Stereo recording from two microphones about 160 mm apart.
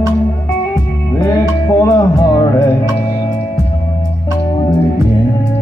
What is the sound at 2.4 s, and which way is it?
Music, 20° left (ahead or behind).